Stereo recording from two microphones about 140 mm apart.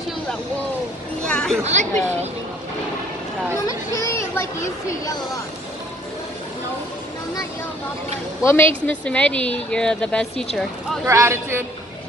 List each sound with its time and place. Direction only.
1.2 s a sound: 5° left (ahead or behind)
1.6 s speech: 55° right (ahead or behind)
3.6 s speech: 25° left (ahead or behind)
8.5 s speech: 15° left (ahead or behind)
11.1 s a man's voice: 20° right (ahead or behind)